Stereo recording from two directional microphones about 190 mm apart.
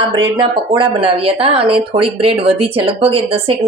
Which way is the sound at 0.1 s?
25° right (ahead or behind).